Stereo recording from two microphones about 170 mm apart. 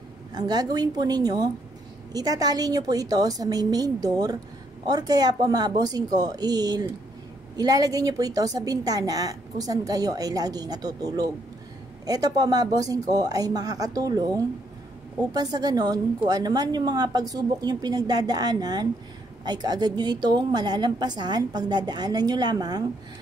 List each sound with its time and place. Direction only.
0.3 s a woman's voice: 25° right (ahead or behind)